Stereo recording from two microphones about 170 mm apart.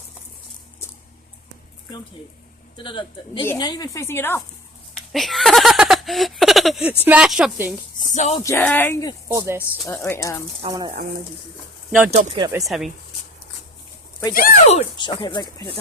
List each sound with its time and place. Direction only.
2.8 s speech: 30° left (ahead or behind); by 4.4 s 15° left (ahead or behind)
5.1 s a sound: centre (ahead or behind)
7.0 s speech: 5° right (ahead or behind)
8.1 s speech: 45° left (ahead or behind)
8.4 s speech: 10° left (ahead or behind)
9.3 s speech: 15° right (ahead or behind)
9.8 s speech: 15° left (ahead or behind)
10.7 s speech: 25° right (ahead or behind)
11.9 s speech: 5° right (ahead or behind)
14.3 s speech: 55° left (ahead or behind)
14.9 s speech: 25° left (ahead or behind)